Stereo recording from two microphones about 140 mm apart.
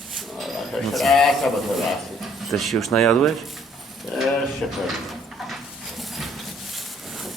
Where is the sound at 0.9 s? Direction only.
Centre (ahead or behind).